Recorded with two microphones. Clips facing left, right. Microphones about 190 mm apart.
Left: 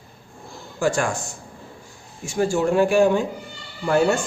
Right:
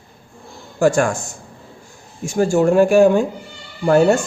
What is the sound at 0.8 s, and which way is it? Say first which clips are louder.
Speech: right 6 dB; 45° right (ahead or behind).